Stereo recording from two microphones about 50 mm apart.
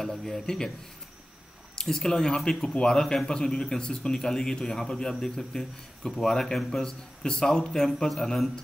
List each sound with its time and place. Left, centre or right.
0.0 s speech: centre
1.8 s speech: centre